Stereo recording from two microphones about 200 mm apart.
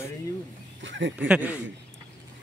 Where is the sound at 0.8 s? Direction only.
65° right (ahead or behind).